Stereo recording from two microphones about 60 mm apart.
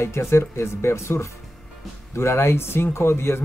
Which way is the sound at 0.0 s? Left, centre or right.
Left.